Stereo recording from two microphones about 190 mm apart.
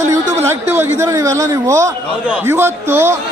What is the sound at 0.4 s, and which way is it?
A man's voice, 15° right (ahead or behind).